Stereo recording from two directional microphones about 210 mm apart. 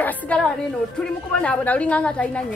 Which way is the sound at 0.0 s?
5° left (ahead or behind).